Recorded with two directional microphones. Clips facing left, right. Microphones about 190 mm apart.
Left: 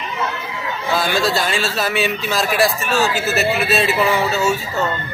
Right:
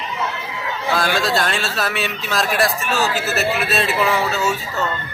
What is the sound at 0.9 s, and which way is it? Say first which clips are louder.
Speech: left 1 dB; centre (ahead or behind).